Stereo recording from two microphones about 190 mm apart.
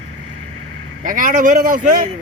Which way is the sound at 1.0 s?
45° right (ahead or behind).